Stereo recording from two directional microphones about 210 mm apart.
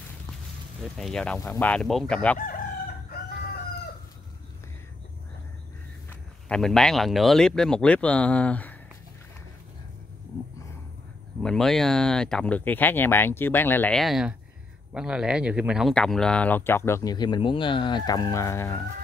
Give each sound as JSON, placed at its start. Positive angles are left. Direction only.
{"t": 0.3, "sound": "speech", "side_deg": 0}
{"t": 2.3, "sound": "crowing", "side_deg": 45}
{"t": 6.0, "sound": "speech", "side_deg": 5}
{"t": 11.4, "sound": "speech", "side_deg": 0}